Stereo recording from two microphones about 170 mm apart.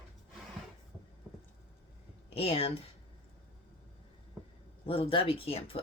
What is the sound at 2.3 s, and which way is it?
Speech, 35° left (ahead or behind).